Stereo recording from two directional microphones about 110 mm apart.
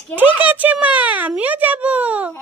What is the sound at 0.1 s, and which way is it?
A child's voice, 15° right (ahead or behind).